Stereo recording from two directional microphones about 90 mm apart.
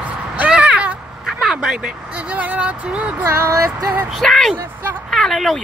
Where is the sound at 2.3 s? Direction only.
15° right (ahead or behind).